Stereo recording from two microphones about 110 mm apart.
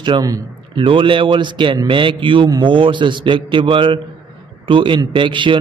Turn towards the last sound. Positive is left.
turn(degrees=-50)  # may be behind; listen again after turning